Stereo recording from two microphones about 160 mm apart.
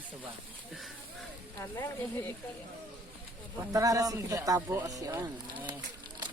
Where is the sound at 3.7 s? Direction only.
20° right (ahead or behind).